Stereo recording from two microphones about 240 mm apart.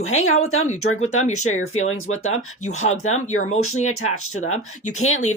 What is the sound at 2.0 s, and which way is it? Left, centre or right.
Speech, left.